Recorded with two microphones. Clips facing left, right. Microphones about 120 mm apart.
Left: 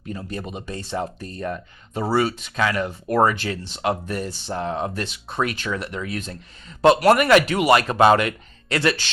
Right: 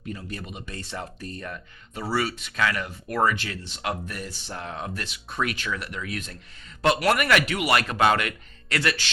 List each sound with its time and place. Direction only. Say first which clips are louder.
0.1 s speech: left 5 dB; 30° left (ahead or behind)